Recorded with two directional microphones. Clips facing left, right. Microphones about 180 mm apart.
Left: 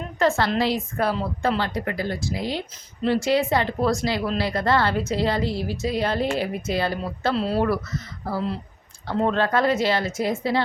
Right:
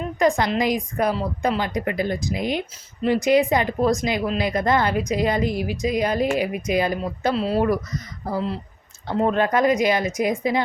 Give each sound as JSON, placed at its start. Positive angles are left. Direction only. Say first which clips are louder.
{"t": 0.2, "sound": "a woman's voice", "louder": "right 1 dB", "side_deg": -15}
{"t": 7.3, "sound": "speech", "louder": "right 1 dB", "side_deg": -5}
{"t": 7.7, "sound": "speech", "louder": "right 2 dB", "side_deg": -15}